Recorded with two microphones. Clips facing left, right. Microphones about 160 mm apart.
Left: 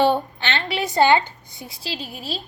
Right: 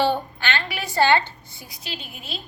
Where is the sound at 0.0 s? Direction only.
20° left (ahead or behind).